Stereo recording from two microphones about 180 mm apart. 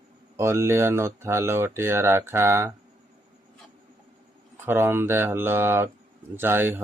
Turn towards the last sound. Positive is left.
turn(degrees=-10)  # may be behind; listen again after turning